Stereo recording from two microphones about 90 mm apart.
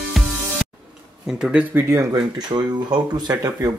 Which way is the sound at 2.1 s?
50° right (ahead or behind).